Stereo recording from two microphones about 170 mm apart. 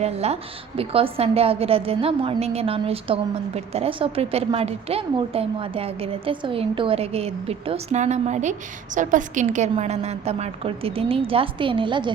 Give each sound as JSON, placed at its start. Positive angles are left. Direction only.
{"t": 0.0, "sound": "a woman's voice", "side_deg": -40}